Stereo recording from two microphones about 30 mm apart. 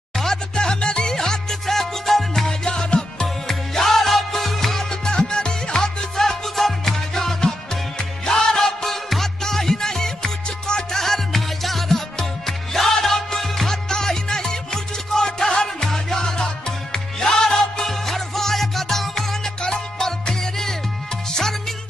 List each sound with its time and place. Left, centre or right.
0.2 s music: centre
0.7 s music: left
1.0 s music: centre
2.6 s music: left
3.4 s music: centre
5.0 s music: left; by 13.7 s centre
13.8 s music: left
17.8 s music: centre